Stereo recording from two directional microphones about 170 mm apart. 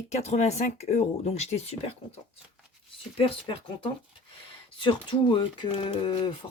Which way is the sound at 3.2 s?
30° left (ahead or behind).